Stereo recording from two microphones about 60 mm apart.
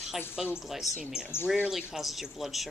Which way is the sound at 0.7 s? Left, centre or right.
Centre.